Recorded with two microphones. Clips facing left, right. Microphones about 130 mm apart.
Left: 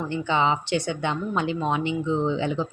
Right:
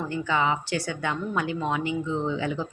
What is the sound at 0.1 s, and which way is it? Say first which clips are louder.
A woman's voice: left 3 dB; 25° left (ahead or behind).